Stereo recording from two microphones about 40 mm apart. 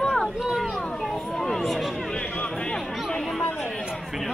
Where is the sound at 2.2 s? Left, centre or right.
Left.